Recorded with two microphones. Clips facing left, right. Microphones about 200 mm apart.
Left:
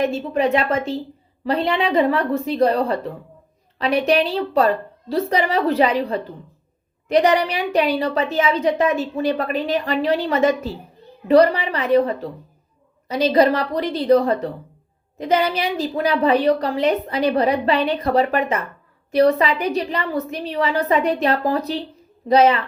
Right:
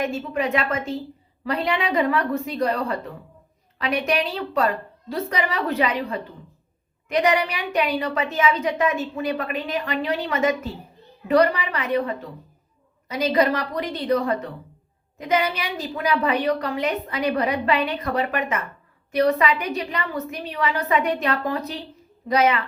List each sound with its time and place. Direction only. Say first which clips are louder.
0.1 s a woman's voice: left 5 dB; 30° left (ahead or behind)